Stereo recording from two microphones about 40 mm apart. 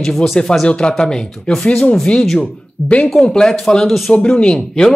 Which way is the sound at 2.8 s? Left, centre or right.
Left.